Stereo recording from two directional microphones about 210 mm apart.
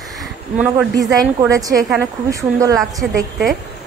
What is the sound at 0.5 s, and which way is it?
Speech, 5° right (ahead or behind).